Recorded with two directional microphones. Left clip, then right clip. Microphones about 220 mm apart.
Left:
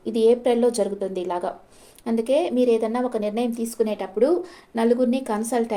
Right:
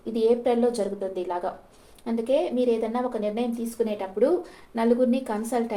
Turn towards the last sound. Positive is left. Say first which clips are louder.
# left 2 dB
turn(degrees=40)  # may be behind; listen again after turning